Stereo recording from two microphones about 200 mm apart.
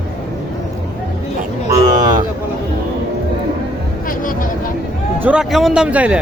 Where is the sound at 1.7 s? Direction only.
20° right (ahead or behind).